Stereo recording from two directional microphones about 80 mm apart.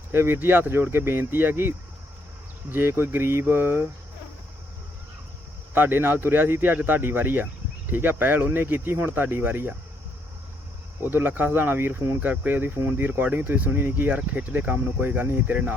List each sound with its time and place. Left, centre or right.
0.1 s speech: right
2.7 s speech: right
5.7 s speech: right
11.0 s speech: right